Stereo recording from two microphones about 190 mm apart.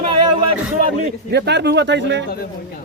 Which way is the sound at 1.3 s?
60° right (ahead or behind).